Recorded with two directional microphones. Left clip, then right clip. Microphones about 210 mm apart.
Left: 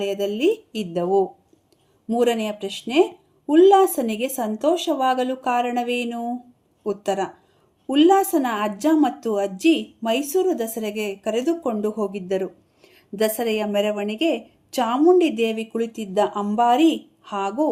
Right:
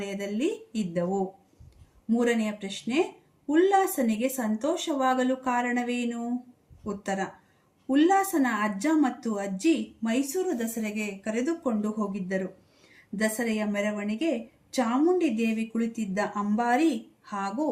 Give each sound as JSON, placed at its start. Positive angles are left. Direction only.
{"t": 0.0, "sound": "a woman's voice", "side_deg": 50}